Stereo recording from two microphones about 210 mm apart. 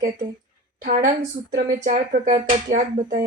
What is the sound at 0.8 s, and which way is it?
Speech, 40° right (ahead or behind).